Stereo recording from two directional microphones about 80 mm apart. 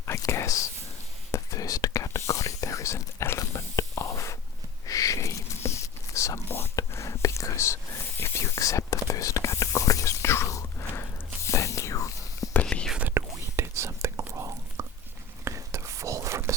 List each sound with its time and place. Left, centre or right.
0.3 s whispering: left
12.7 s whispering: centre
13.1 s whispering: right